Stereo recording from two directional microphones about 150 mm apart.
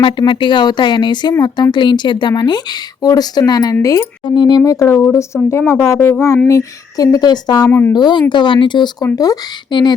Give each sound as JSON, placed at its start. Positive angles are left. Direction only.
{"t": 0.0, "sound": "a woman's voice", "side_deg": 35}
{"t": 7.7, "sound": "speech", "side_deg": 15}
{"t": 7.9, "sound": "a woman's voice", "side_deg": 30}